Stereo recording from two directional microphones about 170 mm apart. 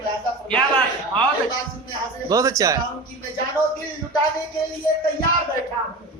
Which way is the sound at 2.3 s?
20° right (ahead or behind).